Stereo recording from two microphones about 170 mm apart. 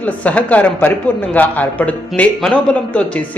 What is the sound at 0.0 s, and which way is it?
A man's voice, 10° left (ahead or behind).